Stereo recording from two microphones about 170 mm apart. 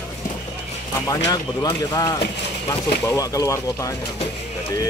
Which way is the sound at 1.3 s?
20° left (ahead or behind).